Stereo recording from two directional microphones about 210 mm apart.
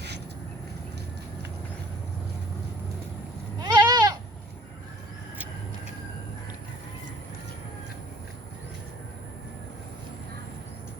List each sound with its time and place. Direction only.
3.6 s goat: 20° right (ahead or behind)